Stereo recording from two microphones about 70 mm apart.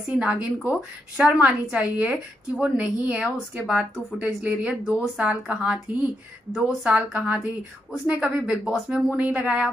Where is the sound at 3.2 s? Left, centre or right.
Centre.